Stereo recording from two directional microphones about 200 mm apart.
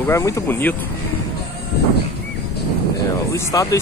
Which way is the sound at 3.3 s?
15° left (ahead or behind).